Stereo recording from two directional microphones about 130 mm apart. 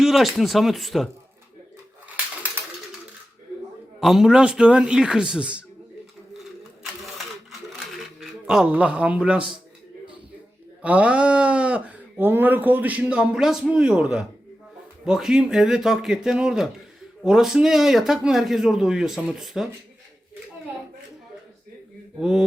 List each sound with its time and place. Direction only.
0.0 s speech: centre (ahead or behind)
4.0 s speech: 5° right (ahead or behind)
7.9 s speech: 5° right (ahead or behind)
10.8 s speech: 10° right (ahead or behind)
22.2 s speech: 5° right (ahead or behind)